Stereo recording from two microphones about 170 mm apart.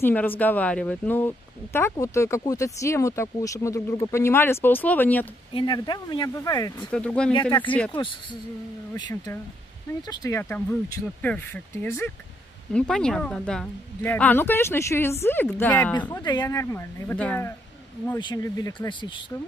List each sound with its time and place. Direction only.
0.0 s speech: 10° left (ahead or behind)
5.5 s speech: 30° left (ahead or behind)
6.9 s speech: 5° left (ahead or behind)
8.9 s speech: 20° left (ahead or behind)
12.7 s speech: 5° left (ahead or behind)
16.2 s speech: 25° left (ahead or behind)
18.2 s speech: 25° left (ahead or behind)